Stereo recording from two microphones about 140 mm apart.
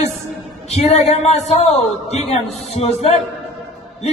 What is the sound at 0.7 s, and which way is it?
A man's voice, 50° left (ahead or behind).